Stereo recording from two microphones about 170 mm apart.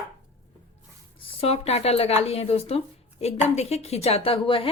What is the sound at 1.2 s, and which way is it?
Speech, 35° left (ahead or behind).